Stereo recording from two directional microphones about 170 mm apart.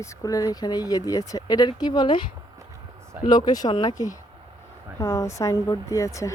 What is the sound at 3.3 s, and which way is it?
Speech, 25° left (ahead or behind).